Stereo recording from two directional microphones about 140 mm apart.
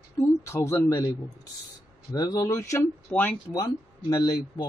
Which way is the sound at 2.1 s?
25° left (ahead or behind).